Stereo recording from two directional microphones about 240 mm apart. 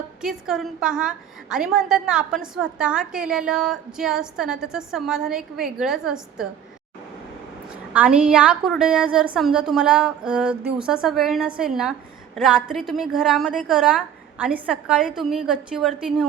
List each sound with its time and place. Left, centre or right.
0.2 s a woman's voice: centre
7.9 s a woman's voice: centre